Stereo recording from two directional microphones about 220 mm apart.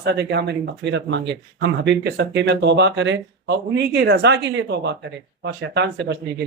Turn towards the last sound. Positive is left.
turn(degrees=-50)  # may be behind; listen again after turning